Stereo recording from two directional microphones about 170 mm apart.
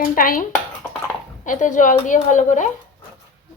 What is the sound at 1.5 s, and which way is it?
Speech, 50° left (ahead or behind).